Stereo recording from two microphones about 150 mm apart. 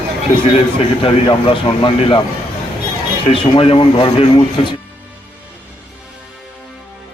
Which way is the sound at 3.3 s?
40° left (ahead or behind).